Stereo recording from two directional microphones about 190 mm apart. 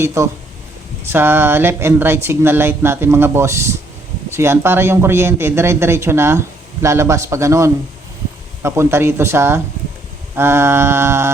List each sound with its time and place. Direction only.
0.0 s speech: 15° right (ahead or behind)